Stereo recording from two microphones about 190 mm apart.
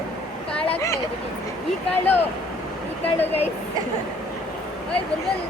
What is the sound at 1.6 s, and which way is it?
Speech, 10° left (ahead or behind).